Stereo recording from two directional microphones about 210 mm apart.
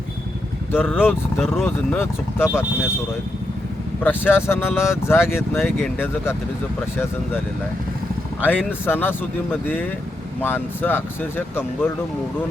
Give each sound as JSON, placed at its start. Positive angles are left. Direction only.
{"t": 0.7, "sound": "speech", "side_deg": 10}
{"t": 4.0, "sound": "speech", "side_deg": 10}
{"t": 8.4, "sound": "speech", "side_deg": 10}